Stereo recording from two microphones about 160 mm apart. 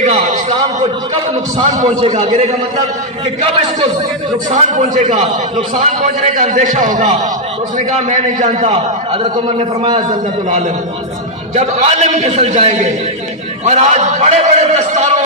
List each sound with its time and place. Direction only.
0.0 s a sound: 50° right (ahead or behind)
2.1 s a man's voice: 40° right (ahead or behind)
4.5 s a man's voice: 50° right (ahead or behind)
11.5 s a man's voice: 45° right (ahead or behind)